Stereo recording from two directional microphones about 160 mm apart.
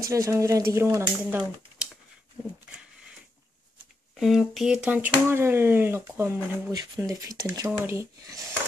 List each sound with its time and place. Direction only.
0.0 s speech: 20° right (ahead or behind)
4.2 s speech: centre (ahead or behind); by 8.5 s 20° right (ahead or behind)